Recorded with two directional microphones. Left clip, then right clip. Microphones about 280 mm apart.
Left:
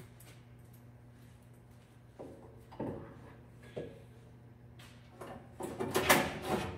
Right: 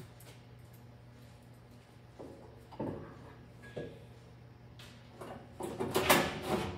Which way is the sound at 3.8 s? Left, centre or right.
Centre.